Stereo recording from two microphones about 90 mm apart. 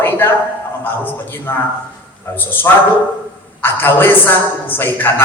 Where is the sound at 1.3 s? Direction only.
25° left (ahead or behind).